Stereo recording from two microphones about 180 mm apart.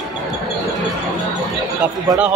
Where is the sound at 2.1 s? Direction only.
20° right (ahead or behind).